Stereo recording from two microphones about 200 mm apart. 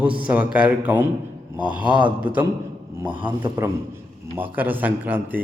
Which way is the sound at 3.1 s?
25° right (ahead or behind).